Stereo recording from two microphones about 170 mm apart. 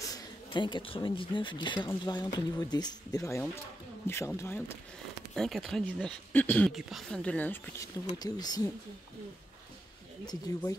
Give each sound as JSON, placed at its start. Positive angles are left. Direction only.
{"t": 0.1, "sound": "speech", "side_deg": 25}
{"t": 5.3, "sound": "speech", "side_deg": 0}
{"t": 8.2, "sound": "speech", "side_deg": 25}
{"t": 10.2, "sound": "speech", "side_deg": 20}